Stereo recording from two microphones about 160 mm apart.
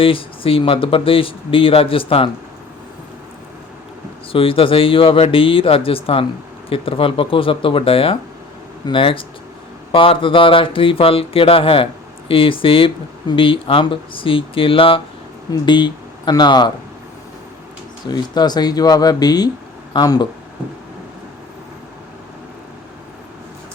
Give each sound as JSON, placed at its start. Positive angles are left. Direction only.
{"t": 0.0, "sound": "speech", "side_deg": 35}
{"t": 4.3, "sound": "speech", "side_deg": 35}
{"t": 18.1, "sound": "speech", "side_deg": 25}